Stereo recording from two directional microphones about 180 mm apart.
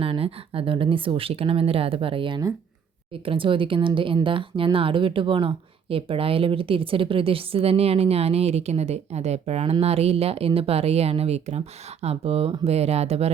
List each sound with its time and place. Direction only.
0.0 s speech: 30° right (ahead or behind)